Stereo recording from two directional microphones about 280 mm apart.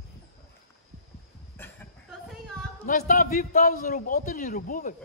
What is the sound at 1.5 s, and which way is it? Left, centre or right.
Cough, centre.